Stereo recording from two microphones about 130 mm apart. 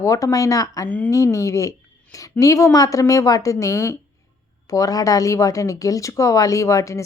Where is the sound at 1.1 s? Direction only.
25° left (ahead or behind).